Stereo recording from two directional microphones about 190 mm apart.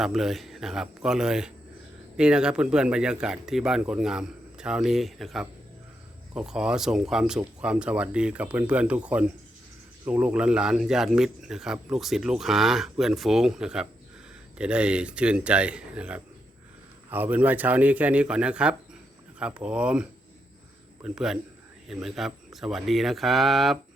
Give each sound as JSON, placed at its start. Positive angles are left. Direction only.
{"t": 0.0, "sound": "a man's voice", "side_deg": 0}